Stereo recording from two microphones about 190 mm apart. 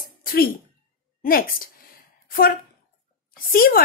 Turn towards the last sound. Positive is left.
turn(degrees=50)  # may be behind; listen again after turning